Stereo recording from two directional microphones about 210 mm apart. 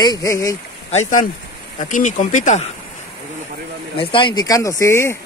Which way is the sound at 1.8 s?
35° left (ahead or behind).